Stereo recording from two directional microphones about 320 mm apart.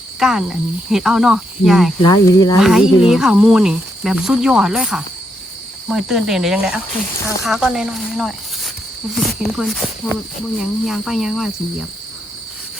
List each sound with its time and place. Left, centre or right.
0.2 s speech: centre
2.0 s speech: centre
2.6 s speech: centre